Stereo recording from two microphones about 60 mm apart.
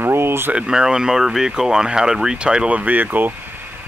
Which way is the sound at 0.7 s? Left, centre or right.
Centre.